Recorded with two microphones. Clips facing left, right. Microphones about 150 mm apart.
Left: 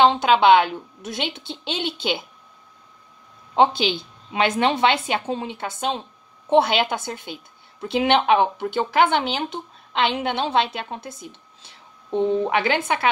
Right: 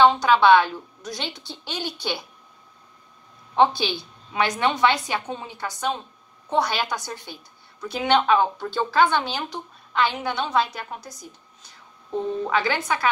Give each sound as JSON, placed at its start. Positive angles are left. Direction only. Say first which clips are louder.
{"t": 0.0, "sound": "a woman's voice", "louder": "left 1 dB", "side_deg": 20}
{"t": 3.5, "sound": "a woman's voice", "louder": "left 1 dB", "side_deg": 20}
{"t": 11.6, "sound": "a sound", "louder": "even", "side_deg": 30}
{"t": 12.6, "sound": "a woman's voice", "louder": "left 3 dB", "side_deg": 20}